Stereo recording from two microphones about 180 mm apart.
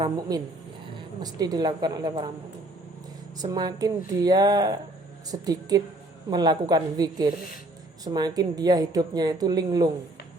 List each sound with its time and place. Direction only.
0.0 s a woman's voice: 20° right (ahead or behind)
3.3 s a woman's voice: 25° right (ahead or behind)